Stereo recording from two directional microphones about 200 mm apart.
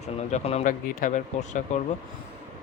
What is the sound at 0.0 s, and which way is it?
Speech, 35° left (ahead or behind).